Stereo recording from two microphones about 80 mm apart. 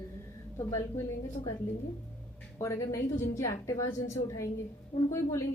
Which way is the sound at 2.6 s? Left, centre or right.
Left.